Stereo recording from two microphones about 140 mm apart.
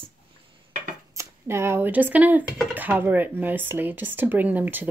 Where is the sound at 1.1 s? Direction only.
20° right (ahead or behind).